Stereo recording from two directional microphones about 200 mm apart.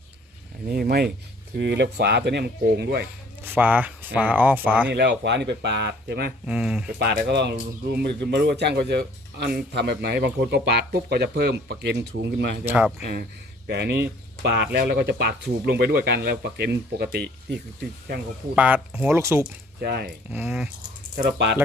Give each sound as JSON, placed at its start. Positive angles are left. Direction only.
{"t": 0.7, "sound": "speech", "side_deg": -50}
{"t": 3.4, "sound": "speech", "side_deg": -10}
{"t": 4.9, "sound": "speech", "side_deg": -55}
{"t": 6.4, "sound": "speech", "side_deg": -5}
{"t": 7.0, "sound": "speech", "side_deg": -55}
{"t": 12.6, "sound": "speech", "side_deg": -5}
{"t": 13.0, "sound": "speech", "side_deg": -50}
{"t": 18.5, "sound": "speech", "side_deg": -5}
{"t": 19.8, "sound": "speech", "side_deg": -55}
{"t": 20.3, "sound": "speech", "side_deg": -5}
{"t": 21.3, "sound": "speech", "side_deg": -60}